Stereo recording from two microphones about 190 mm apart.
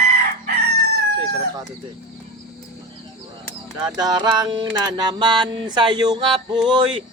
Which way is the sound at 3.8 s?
20° right (ahead or behind).